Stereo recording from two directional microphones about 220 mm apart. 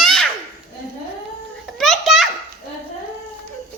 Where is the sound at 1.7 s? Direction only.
Centre (ahead or behind).